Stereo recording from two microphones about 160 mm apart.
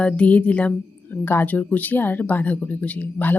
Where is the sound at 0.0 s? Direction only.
10° left (ahead or behind).